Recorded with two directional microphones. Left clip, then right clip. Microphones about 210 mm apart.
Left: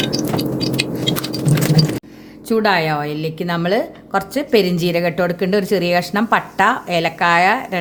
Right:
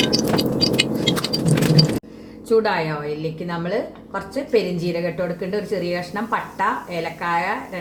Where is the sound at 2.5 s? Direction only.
50° left (ahead or behind).